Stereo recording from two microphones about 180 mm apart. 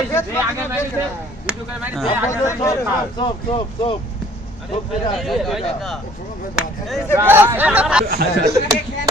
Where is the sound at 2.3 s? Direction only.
15° left (ahead or behind).